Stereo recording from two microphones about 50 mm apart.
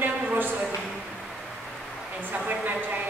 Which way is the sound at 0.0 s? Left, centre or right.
Right.